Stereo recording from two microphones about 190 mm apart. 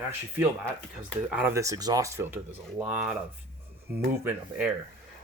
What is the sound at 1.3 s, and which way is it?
Speech, 10° right (ahead or behind).